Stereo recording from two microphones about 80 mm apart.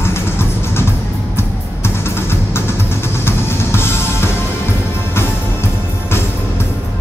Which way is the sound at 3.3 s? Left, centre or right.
Left.